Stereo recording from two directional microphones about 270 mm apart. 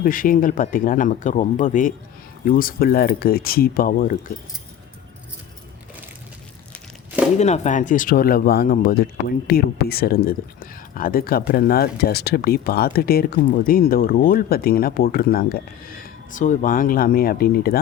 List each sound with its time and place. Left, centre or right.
0.0 s speech: left
7.3 s speech: left